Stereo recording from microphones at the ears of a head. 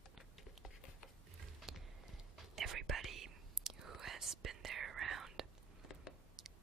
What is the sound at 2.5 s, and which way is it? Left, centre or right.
Whispering, right.